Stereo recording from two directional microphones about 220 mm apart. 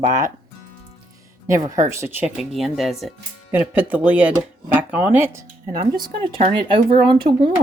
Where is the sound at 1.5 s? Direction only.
15° right (ahead or behind).